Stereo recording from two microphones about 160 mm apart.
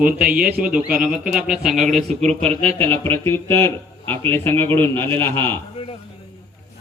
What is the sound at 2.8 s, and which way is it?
Speech, 15° left (ahead or behind).